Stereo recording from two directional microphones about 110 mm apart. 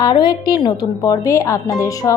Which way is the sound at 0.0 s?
40° left (ahead or behind).